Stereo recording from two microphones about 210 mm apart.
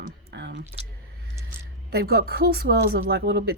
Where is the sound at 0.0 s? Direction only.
55° right (ahead or behind).